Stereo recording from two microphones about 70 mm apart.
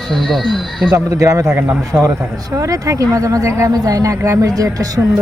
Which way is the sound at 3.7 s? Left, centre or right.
Right.